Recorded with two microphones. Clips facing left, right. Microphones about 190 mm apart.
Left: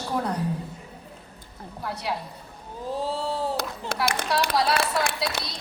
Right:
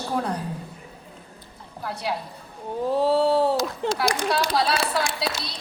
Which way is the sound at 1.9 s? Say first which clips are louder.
Right 2 dB; 30° right (ahead or behind).